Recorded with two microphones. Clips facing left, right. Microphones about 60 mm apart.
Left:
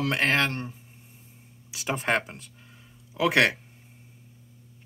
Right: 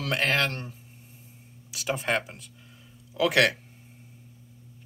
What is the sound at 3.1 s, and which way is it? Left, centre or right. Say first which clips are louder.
Speech: even; left.